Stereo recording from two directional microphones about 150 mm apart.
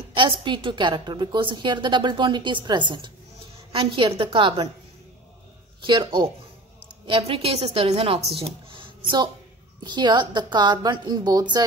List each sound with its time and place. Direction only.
0.1 s a woman's voice: 35° right (ahead or behind)
5.9 s a woman's voice: 35° right (ahead or behind)